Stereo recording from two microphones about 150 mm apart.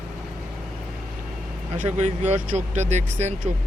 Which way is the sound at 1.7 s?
50° right (ahead or behind).